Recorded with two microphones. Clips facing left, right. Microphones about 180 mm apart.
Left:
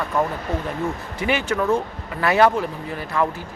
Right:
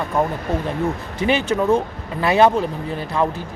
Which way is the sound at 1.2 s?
20° right (ahead or behind).